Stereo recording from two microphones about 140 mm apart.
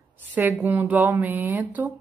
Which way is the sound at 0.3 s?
15° right (ahead or behind).